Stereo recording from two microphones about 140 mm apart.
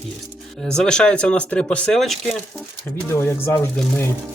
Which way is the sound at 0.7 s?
5° left (ahead or behind).